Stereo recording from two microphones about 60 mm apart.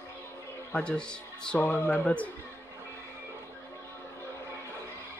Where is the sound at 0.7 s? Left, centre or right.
Centre.